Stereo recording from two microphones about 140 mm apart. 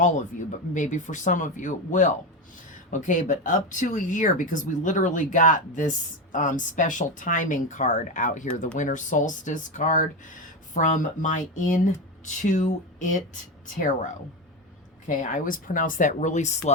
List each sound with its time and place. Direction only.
0.3 s speech: 65° left (ahead or behind)